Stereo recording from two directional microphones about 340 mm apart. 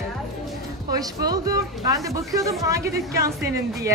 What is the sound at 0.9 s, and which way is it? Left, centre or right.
A woman's voice, centre.